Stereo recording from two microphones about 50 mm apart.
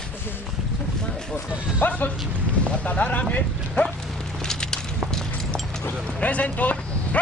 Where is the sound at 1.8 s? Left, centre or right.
Left.